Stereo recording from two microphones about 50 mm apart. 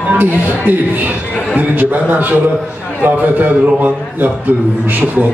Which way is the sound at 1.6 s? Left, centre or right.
Right.